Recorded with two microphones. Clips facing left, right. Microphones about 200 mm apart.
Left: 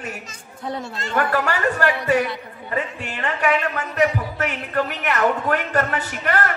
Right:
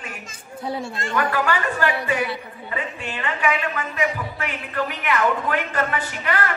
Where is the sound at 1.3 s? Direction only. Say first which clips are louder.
Left 2 dB; 40° left (ahead or behind).